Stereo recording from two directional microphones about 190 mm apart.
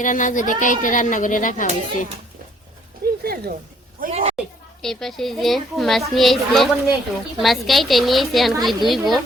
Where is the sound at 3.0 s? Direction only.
55° right (ahead or behind).